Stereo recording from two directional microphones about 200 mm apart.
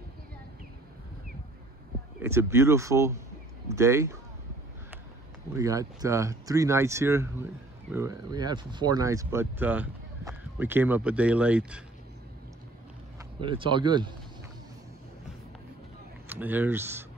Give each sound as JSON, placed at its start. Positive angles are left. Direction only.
{"t": 2.2, "sound": "speech", "side_deg": -15}
{"t": 5.5, "sound": "speech", "side_deg": -15}
{"t": 13.4, "sound": "speech", "side_deg": -25}
{"t": 16.3, "sound": "speech", "side_deg": -10}